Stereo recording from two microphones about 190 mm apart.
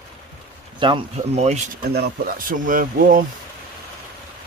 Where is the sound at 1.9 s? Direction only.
55° right (ahead or behind).